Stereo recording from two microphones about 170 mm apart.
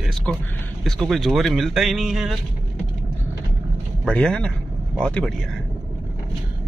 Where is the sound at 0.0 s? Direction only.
Centre (ahead or behind).